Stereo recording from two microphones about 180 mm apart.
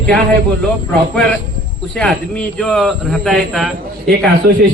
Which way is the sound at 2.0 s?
5° left (ahead or behind).